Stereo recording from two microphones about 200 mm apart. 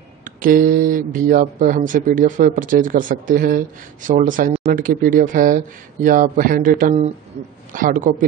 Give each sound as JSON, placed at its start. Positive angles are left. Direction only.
{"t": 0.2, "sound": "a man's voice", "side_deg": -45}